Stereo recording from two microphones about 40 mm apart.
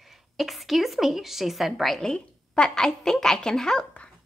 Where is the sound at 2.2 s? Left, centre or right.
Left.